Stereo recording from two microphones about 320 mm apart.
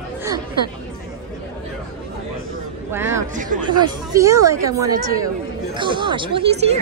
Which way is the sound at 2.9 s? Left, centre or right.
Centre.